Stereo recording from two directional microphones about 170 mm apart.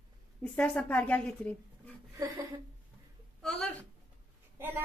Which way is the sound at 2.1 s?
25° right (ahead or behind).